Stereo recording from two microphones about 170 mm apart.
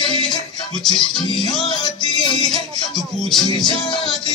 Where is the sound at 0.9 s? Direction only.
25° left (ahead or behind).